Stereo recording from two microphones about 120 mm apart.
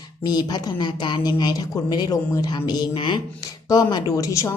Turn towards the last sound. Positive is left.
turn(degrees=25)  # may be behind; listen again after turning